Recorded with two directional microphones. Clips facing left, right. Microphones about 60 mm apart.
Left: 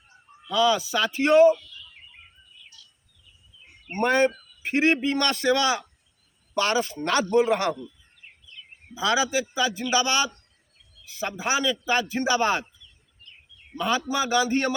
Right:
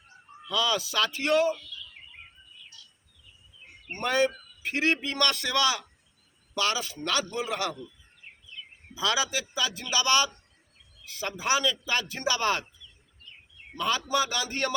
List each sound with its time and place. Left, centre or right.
0.4 s a man's voice: left
3.9 s a man's voice: left
9.0 s a man's voice: left
13.7 s a man's voice: centre